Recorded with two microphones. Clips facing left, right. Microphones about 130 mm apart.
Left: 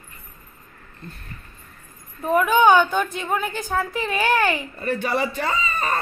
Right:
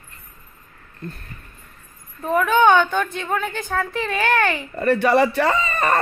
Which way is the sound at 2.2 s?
10° left (ahead or behind).